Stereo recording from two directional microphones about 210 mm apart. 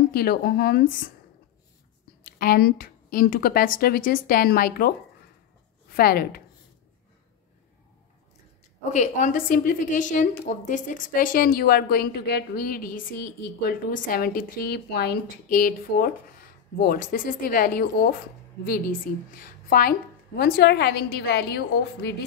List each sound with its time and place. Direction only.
0.1 s a woman's voice: 45° left (ahead or behind)
2.2 s a woman's voice: 45° left (ahead or behind)
8.9 s a woman's voice: 35° left (ahead or behind); by 22.1 s 50° left (ahead or behind)